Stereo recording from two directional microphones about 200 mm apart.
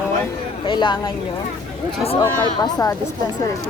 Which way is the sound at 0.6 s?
25° left (ahead or behind).